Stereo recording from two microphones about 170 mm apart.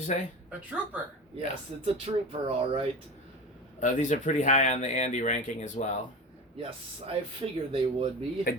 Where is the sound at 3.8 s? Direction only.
45° left (ahead or behind).